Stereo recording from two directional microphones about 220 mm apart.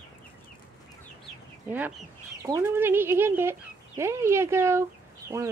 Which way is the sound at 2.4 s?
15° right (ahead or behind).